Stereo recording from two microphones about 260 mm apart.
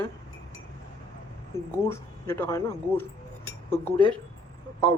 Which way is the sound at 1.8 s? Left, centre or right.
Centre.